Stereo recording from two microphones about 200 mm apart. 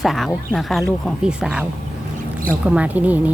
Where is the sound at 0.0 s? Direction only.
Centre (ahead or behind).